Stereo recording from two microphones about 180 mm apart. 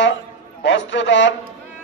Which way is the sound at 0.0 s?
80° left.